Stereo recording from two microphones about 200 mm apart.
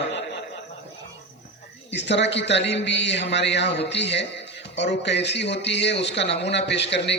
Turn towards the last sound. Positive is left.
turn(degrees=60)  # may be behind; listen again after turning